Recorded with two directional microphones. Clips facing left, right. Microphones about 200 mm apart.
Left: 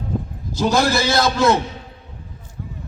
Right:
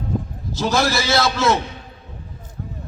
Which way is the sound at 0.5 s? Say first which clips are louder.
Left 2 dB; 15° left (ahead or behind).